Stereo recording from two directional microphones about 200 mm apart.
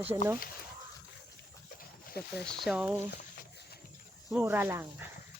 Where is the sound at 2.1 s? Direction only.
55° left (ahead or behind).